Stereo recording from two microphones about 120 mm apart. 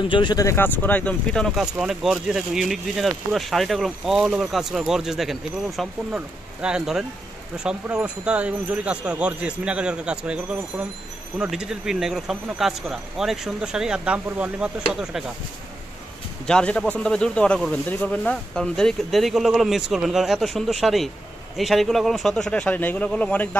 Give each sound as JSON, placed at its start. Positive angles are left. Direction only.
{"t": 0.1, "sound": "speech", "side_deg": 40}
{"t": 0.5, "sound": "speech", "side_deg": 15}
{"t": 16.4, "sound": "speech", "side_deg": 5}